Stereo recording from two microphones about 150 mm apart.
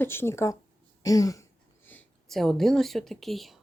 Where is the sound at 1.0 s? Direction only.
25° left (ahead or behind).